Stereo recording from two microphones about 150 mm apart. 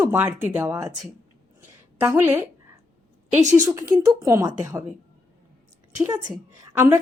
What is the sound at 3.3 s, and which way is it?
Speech, 50° right (ahead or behind).